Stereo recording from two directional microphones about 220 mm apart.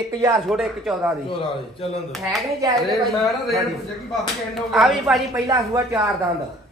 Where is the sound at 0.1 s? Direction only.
15° right (ahead or behind).